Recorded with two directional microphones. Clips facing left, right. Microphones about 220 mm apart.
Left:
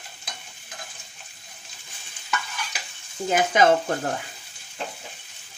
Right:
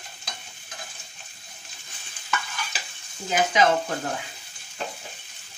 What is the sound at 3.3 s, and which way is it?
Stir, 50° left (ahead or behind).